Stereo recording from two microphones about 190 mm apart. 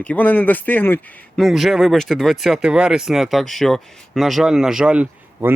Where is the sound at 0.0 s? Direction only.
10° left (ahead or behind).